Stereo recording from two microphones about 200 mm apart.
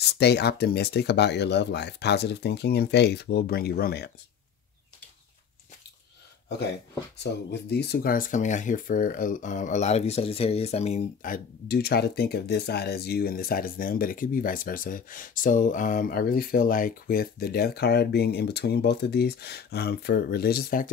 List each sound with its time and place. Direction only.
0.0 s speech: 55° left (ahead or behind)
7.2 s speech: 55° left (ahead or behind)